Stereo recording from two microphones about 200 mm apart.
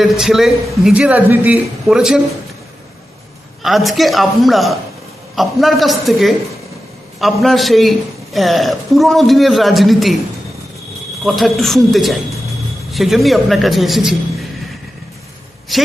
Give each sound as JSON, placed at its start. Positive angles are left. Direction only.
{"t": 0.0, "sound": "a man's voice", "side_deg": 0}
{"t": 3.6, "sound": "a man's voice", "side_deg": 0}
{"t": 11.2, "sound": "a man's voice", "side_deg": 0}
{"t": 15.7, "sound": "a woman's voice", "side_deg": 0}